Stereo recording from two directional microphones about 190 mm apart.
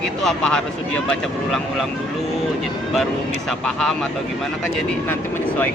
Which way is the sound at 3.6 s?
Centre (ahead or behind).